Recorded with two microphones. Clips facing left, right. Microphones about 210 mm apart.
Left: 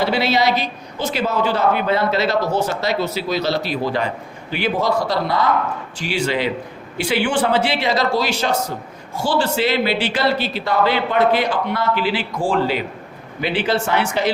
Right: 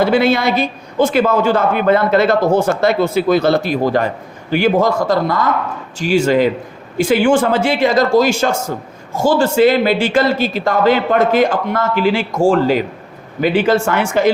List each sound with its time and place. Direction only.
0.0 s a man's voice: 50° right (ahead or behind)